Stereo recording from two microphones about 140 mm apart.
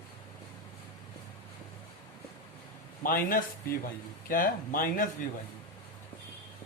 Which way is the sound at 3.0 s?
90° left.